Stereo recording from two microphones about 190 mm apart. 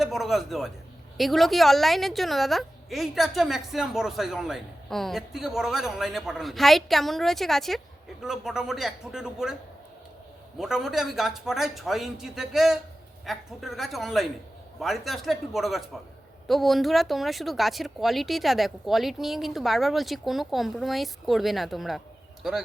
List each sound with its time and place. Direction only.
0.0 s a woman's voice: centre (ahead or behind)
10.6 s a woman's voice: centre (ahead or behind)